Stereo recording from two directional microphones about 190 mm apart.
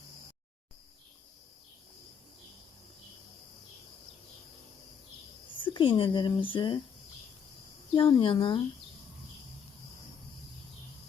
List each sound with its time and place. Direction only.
5.7 s speech: 25° left (ahead or behind)
7.9 s speech: 20° left (ahead or behind)